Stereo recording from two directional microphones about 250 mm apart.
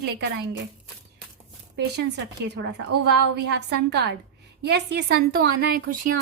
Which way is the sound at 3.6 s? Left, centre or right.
Right.